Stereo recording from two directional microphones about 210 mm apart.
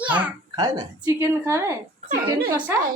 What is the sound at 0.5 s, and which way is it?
A woman's voice, 20° right (ahead or behind).